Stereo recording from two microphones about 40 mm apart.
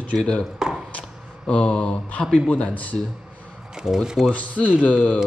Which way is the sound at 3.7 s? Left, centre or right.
Centre.